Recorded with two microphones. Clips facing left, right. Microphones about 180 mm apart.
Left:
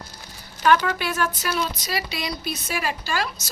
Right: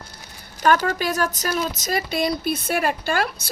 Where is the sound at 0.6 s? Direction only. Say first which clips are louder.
Right 1 dB; 45° right (ahead or behind).